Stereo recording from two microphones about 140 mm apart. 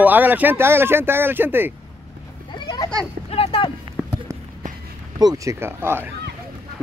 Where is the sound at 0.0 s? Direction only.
10° right (ahead or behind).